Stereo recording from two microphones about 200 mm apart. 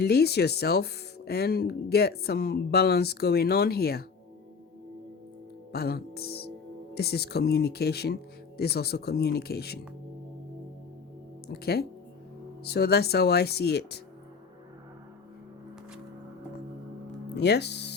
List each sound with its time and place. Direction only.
0.0 s speech: 55° left (ahead or behind)
5.7 s speech: 50° left (ahead or behind)
11.4 s speech: 50° left (ahead or behind)
17.3 s speech: 55° left (ahead or behind)